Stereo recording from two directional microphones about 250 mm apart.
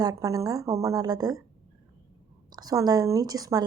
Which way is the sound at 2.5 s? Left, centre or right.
Centre.